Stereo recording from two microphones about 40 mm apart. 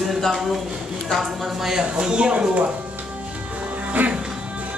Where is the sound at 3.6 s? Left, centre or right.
Right.